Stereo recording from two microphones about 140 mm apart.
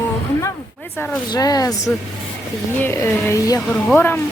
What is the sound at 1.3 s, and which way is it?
Speech, 25° left (ahead or behind).